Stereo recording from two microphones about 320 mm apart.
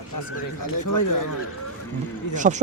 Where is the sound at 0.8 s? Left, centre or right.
Left.